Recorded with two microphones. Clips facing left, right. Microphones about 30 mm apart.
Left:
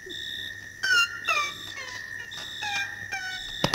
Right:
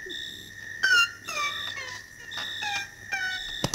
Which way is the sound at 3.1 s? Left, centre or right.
Centre.